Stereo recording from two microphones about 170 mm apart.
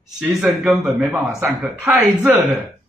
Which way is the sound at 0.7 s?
15° right (ahead or behind).